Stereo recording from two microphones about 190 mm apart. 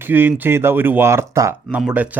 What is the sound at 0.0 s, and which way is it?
Speech, 10° right (ahead or behind).